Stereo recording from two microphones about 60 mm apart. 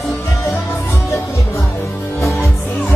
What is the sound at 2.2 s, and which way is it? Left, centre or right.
Music, left.